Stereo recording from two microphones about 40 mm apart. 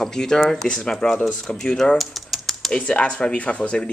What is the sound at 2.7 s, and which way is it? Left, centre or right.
Speech, left.